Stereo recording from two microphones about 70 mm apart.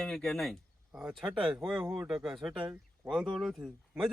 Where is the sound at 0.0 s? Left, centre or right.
Centre.